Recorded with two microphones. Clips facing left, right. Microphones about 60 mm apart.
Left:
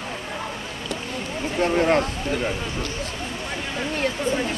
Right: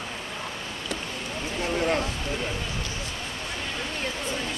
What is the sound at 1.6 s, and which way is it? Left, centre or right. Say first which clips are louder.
Speech: left 7 dB; left.